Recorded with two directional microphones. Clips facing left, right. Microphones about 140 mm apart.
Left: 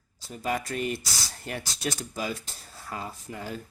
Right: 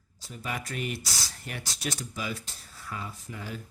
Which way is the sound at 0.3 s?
40° left (ahead or behind).